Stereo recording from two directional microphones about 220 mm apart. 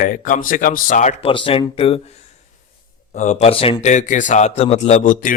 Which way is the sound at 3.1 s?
35° left (ahead or behind).